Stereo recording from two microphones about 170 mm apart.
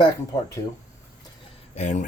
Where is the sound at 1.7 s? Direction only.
45° left (ahead or behind).